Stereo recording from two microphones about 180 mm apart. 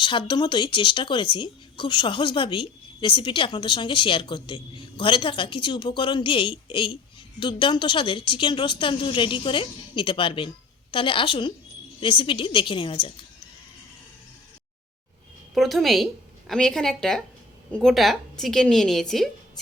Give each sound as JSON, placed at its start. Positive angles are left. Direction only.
{"t": 0.0, "sound": "speech", "side_deg": 25}
{"t": 15.5, "sound": "a woman's voice", "side_deg": 0}